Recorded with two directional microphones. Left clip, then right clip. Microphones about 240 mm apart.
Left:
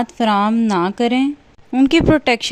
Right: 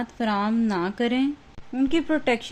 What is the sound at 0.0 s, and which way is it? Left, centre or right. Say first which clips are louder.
Speech: left 10 dB; left.